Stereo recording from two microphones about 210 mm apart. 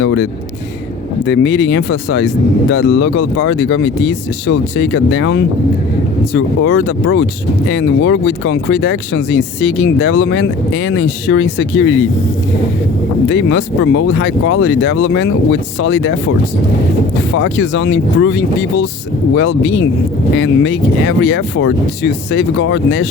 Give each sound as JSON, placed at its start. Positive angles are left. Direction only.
{"t": 0.0, "sound": "speech", "side_deg": 60}
{"t": 1.3, "sound": "speech", "side_deg": 60}
{"t": 13.3, "sound": "speech", "side_deg": 65}
{"t": 17.3, "sound": "speech", "side_deg": 60}